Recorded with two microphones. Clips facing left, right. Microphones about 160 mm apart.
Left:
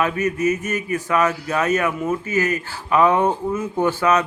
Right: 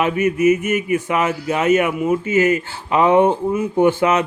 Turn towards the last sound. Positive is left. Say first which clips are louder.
# right 3 dB
turn(degrees=-20)  # may be behind; listen again after turning